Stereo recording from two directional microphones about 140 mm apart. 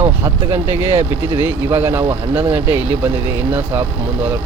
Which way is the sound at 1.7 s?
15° right (ahead or behind).